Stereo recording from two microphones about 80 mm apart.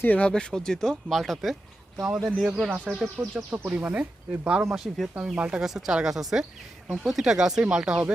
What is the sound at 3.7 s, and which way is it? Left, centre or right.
Speech, centre.